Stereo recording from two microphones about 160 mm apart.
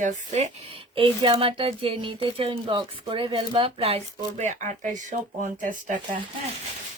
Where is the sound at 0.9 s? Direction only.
30° right (ahead or behind); by 6.0 s 50° right (ahead or behind).